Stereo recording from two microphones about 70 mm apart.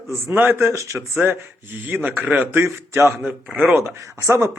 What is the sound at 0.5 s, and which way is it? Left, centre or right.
Speech, right.